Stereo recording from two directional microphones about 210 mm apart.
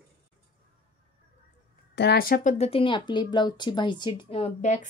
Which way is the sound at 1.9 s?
50° left (ahead or behind).